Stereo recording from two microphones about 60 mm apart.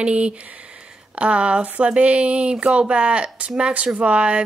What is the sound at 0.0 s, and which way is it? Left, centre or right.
Speech, centre.